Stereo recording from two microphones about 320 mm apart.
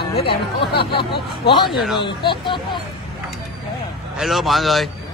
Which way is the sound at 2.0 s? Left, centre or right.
Centre.